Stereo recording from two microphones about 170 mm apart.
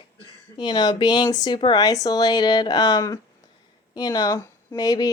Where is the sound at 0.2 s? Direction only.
25° left (ahead or behind).